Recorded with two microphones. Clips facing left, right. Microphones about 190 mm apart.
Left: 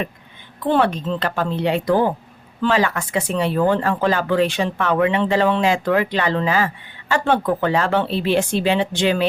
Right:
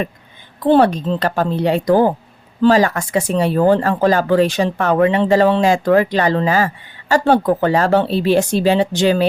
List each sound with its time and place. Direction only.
0.6 s speech: 40° right (ahead or behind)